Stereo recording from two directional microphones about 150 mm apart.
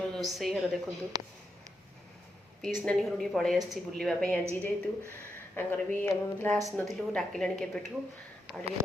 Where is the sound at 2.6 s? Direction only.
5° left (ahead or behind).